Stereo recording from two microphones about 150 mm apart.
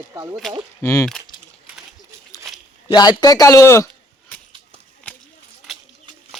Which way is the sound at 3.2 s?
25° left (ahead or behind).